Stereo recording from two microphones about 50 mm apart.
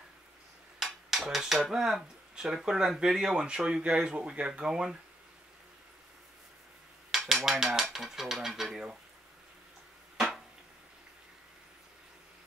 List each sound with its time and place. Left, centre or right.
0.7 s cutlery: centre
2.3 s speech: centre
7.1 s cutlery: centre
7.5 s speech: centre
10.1 s a sound: centre